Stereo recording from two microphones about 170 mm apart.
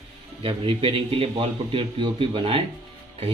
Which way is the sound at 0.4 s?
30° right (ahead or behind).